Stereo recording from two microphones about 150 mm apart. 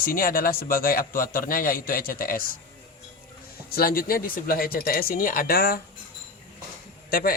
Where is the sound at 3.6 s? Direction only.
90° left.